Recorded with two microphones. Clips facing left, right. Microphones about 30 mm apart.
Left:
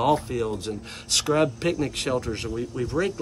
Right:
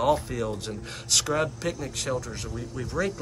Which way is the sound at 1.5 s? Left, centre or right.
Left.